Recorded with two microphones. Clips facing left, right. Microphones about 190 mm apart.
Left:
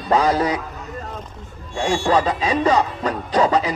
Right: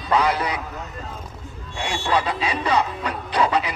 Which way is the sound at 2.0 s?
45° left (ahead or behind).